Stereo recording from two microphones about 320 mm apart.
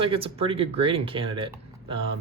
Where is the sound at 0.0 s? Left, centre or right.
Centre.